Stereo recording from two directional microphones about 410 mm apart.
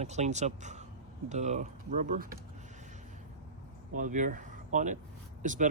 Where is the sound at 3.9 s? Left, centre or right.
Centre.